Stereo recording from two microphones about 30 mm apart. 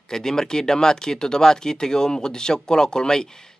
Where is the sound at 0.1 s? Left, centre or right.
Centre.